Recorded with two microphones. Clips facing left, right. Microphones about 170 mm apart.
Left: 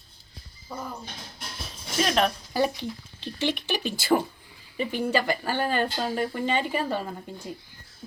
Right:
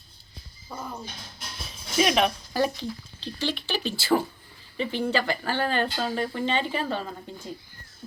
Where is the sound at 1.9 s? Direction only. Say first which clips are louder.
Right 1 dB; 5° right (ahead or behind).